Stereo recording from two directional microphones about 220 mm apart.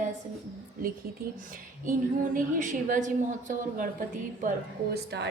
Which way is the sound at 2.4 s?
35° right (ahead or behind).